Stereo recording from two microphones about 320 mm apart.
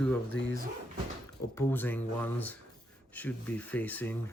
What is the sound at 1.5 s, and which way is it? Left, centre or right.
Speech, centre.